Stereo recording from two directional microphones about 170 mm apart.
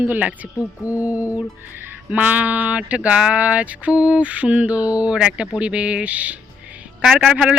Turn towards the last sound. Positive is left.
turn(degrees=-5)  # may be behind; listen again after turning